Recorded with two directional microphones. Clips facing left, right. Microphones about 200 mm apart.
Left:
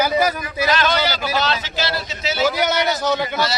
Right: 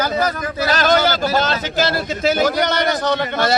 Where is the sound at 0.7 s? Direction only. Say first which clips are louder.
Right 4 dB; 45° right (ahead or behind).